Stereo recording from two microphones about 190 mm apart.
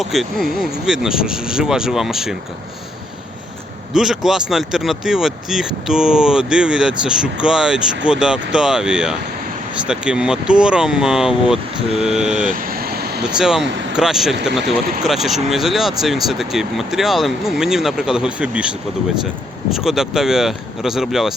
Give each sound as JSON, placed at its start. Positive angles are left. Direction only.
{"t": 0.0, "sound": "speech", "side_deg": 0}
{"t": 3.9, "sound": "speech", "side_deg": 0}
{"t": 12.1, "sound": "vehicle", "side_deg": -40}
{"t": 13.2, "sound": "speech", "side_deg": -5}